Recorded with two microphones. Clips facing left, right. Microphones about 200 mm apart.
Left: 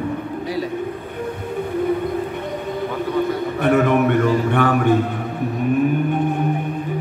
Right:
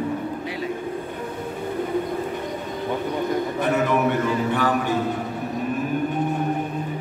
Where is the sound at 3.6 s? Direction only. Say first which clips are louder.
Left 6 dB; 60° left (ahead or behind).